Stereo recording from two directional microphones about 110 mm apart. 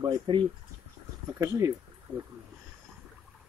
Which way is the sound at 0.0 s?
45° right (ahead or behind).